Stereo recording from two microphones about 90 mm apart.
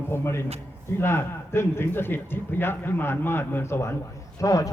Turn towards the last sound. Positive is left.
turn(degrees=40)  # may be behind; listen again after turning